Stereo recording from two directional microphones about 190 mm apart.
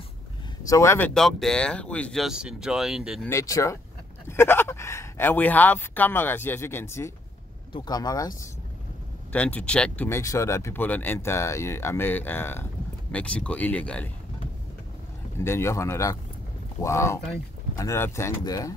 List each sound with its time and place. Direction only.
0.7 s speech: 15° left (ahead or behind); by 3.3 s centre (ahead or behind)
3.3 s speech: 15° left (ahead or behind)
7.7 s speech: 25° left (ahead or behind)
9.3 s speech: 5° left (ahead or behind)
15.3 s speech: 15° left (ahead or behind)